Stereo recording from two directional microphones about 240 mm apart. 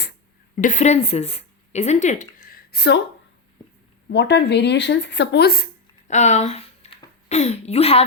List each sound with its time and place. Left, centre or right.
0.5 s speech: left
4.1 s speech: left
6.1 s speech: left